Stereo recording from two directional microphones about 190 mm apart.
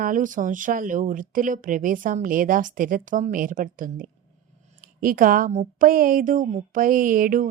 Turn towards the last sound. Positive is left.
turn(degrees=-45)  # may be behind; listen again after turning